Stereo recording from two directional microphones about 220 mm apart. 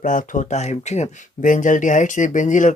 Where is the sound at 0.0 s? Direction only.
35° left (ahead or behind).